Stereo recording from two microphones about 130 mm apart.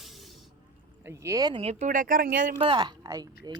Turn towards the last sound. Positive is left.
turn(degrees=-30)  # may be behind; listen again after turning